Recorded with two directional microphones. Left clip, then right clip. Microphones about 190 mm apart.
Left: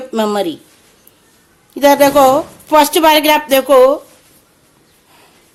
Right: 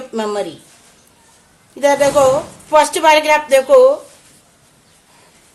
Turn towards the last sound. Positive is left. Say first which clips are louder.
# left 1 dB
turn(degrees=40)  # may be behind; listen again after turning